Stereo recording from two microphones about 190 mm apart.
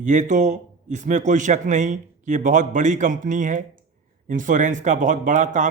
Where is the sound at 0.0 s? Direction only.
40° right (ahead or behind).